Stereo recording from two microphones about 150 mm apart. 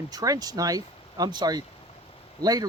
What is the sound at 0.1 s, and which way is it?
Speech, 25° right (ahead or behind).